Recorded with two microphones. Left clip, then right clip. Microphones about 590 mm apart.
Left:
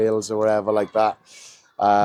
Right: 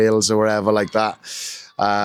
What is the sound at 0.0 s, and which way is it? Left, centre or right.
Speech, right.